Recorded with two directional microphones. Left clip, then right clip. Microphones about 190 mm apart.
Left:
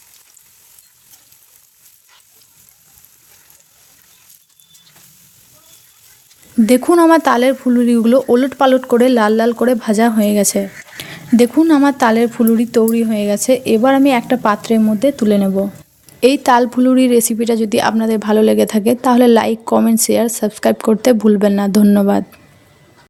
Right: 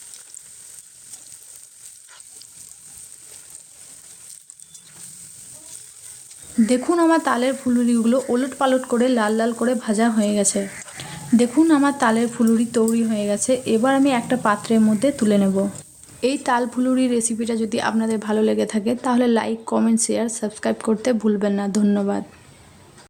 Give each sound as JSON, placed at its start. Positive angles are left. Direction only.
{"t": 6.7, "sound": "speech", "side_deg": 40}
{"t": 16.2, "sound": "speech", "side_deg": 35}